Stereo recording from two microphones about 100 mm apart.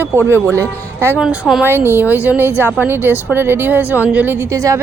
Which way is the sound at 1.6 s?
25° right (ahead or behind).